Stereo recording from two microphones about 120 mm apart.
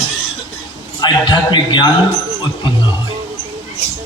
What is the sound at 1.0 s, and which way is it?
A man's voice, 40° left (ahead or behind).